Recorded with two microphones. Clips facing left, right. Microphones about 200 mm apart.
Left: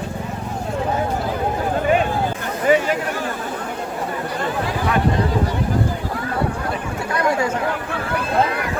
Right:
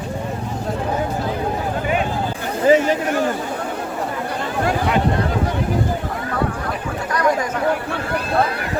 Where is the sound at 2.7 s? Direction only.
30° right (ahead or behind).